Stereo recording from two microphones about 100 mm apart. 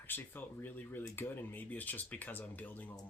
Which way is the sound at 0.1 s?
20° left (ahead or behind).